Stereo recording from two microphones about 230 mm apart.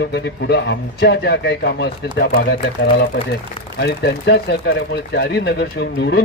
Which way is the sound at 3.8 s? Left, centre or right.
Left.